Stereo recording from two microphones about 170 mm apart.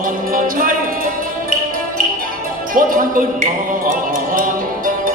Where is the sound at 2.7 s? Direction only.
55° right (ahead or behind).